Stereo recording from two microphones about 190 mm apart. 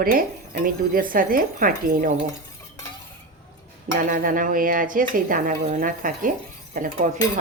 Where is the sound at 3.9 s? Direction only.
45° right (ahead or behind).